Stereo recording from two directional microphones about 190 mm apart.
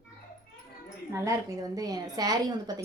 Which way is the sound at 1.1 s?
15° right (ahead or behind).